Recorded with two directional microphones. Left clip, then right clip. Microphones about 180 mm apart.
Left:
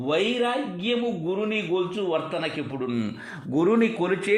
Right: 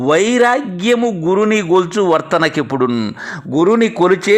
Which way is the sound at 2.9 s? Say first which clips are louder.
Right 11 dB; 30° right (ahead or behind).